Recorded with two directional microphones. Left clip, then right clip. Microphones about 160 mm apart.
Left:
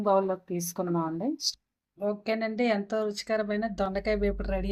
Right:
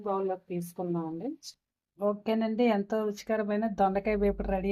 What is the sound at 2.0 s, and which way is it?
Speech, 45° right (ahead or behind).